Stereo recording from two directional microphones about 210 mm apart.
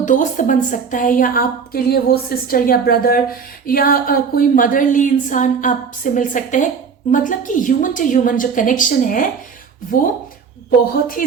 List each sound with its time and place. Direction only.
0.0 s a woman's voice: 35° left (ahead or behind)